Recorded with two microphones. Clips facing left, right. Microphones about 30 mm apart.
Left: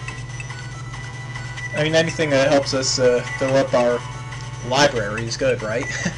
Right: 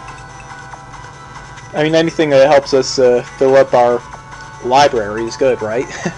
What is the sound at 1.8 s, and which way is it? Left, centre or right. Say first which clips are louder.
Speech: right 6 dB; centre.